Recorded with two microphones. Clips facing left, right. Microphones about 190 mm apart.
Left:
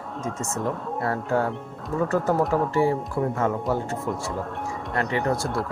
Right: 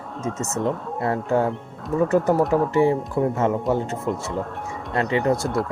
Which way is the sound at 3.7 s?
20° right (ahead or behind).